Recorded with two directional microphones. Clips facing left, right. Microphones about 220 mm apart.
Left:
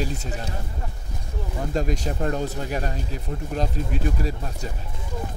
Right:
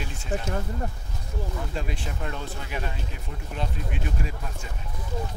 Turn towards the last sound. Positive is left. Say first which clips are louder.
# left 6 dB
turn(degrees=35)  # may be behind; listen again after turning